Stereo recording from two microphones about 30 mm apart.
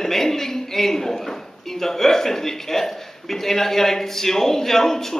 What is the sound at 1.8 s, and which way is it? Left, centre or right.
Speech, centre.